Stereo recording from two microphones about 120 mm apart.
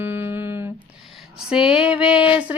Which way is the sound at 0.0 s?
20° right (ahead or behind).